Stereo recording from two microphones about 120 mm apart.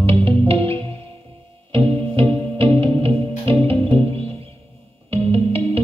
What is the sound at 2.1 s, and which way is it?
Music, 50° right (ahead or behind).